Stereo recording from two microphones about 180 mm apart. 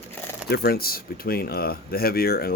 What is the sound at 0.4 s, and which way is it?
Speech, 60° left (ahead or behind).